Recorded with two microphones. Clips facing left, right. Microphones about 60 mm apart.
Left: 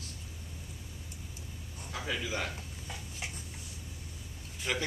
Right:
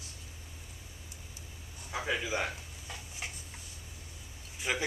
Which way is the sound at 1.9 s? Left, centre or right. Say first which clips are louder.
Right 3 dB; centre.